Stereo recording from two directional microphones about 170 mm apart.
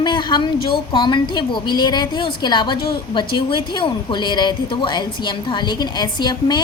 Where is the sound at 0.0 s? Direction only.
25° left (ahead or behind).